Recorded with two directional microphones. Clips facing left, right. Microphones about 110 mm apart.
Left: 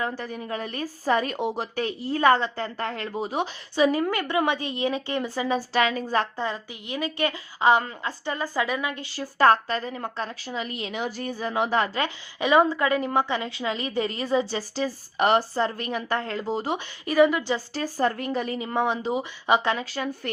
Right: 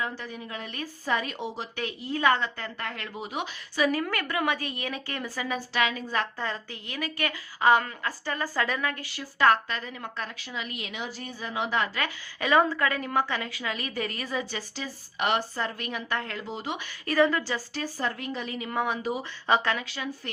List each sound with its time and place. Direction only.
0.0 s a woman's voice: 45° left (ahead or behind)
1.7 s a woman's voice: 35° left (ahead or behind)
6.3 s a woman's voice: 15° left (ahead or behind)
9.2 s a woman's voice: 35° left (ahead or behind)
10.9 s a woman's voice: 45° left (ahead or behind)
11.9 s a woman's voice: 20° left (ahead or behind); by 16.8 s 35° left (ahead or behind)
17.1 s a woman's voice: 15° left (ahead or behind)
17.7 s a woman's voice: 40° left (ahead or behind)
18.5 s a woman's voice: 25° left (ahead or behind)
19.8 s a woman's voice: 40° left (ahead or behind)